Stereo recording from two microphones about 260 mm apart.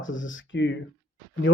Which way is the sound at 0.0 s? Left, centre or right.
Left.